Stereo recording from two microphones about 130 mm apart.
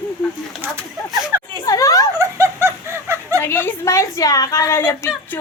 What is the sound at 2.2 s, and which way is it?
Snicker, 20° right (ahead or behind).